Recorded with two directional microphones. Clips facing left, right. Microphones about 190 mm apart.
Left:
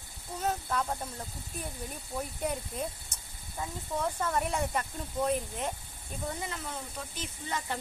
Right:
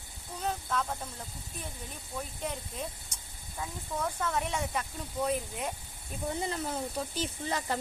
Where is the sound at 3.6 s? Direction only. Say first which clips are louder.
Left 2 dB; 10° left (ahead or behind).